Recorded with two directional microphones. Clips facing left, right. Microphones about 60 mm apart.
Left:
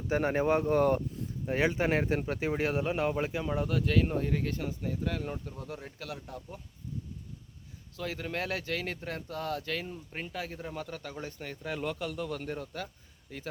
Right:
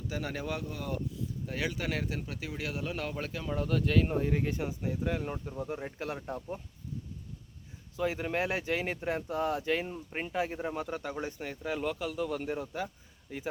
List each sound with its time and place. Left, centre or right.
0.1 s speech: left
1.5 s speech: left; by 3.7 s centre
3.7 s speech: centre
5.7 s speech: right
7.9 s speech: centre